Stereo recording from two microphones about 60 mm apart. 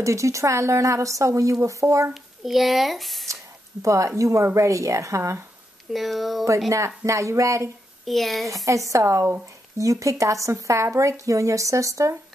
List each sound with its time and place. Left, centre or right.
0.0 s speech: right
2.4 s speech: centre
3.8 s speech: right
5.9 s speech: centre
7.1 s speech: right
8.0 s speech: centre
8.6 s speech: right